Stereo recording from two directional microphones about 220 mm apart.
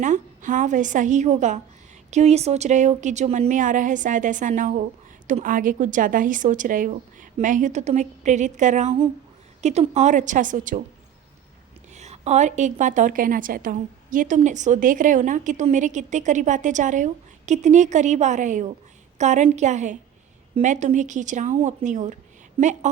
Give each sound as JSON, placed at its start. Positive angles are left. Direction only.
{"t": 0.0, "sound": "a woman's voice", "side_deg": -35}
{"t": 11.9, "sound": "a woman's voice", "side_deg": -30}